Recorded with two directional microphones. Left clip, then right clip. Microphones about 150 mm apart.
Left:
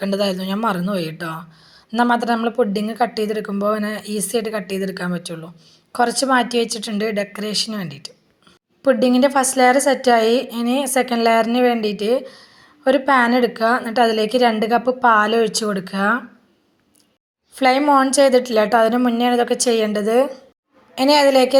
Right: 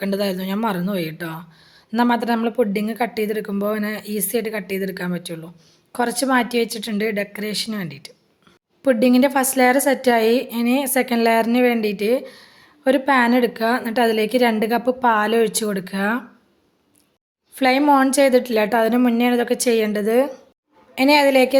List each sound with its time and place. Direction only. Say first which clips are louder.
0.0 s a woman's voice: left 2 dB; 20° right (ahead or behind)
17.5 s a woman's voice: left 1 dB; 20° right (ahead or behind)